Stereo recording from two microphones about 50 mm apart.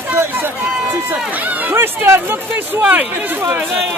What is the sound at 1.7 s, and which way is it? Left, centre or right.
Speech, right.